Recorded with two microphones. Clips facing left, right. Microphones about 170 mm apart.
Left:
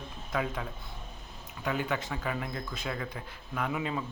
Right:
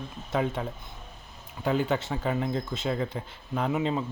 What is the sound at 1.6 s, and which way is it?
Speech, 30° right (ahead or behind).